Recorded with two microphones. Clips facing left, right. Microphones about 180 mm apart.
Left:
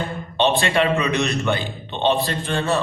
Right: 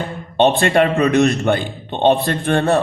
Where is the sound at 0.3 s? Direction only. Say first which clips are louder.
Right 5 dB; 50° right (ahead or behind).